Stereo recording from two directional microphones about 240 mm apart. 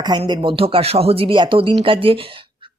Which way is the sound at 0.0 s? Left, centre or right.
Centre.